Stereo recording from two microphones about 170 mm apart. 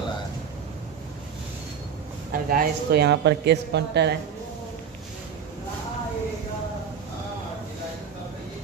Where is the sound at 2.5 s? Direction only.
65° right (ahead or behind); by 4.1 s 85° right.